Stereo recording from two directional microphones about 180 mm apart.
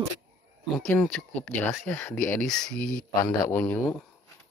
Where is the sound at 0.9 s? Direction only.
5° left (ahead or behind).